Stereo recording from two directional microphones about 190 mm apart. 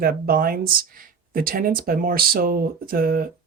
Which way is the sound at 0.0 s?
50° right (ahead or behind).